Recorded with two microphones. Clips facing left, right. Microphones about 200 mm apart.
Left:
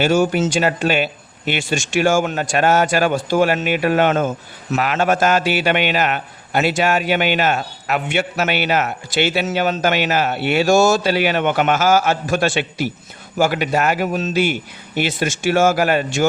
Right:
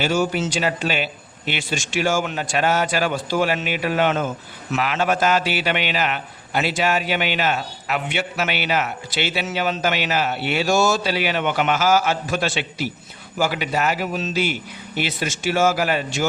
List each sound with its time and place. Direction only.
0.0 s a man's voice: 50° left (ahead or behind)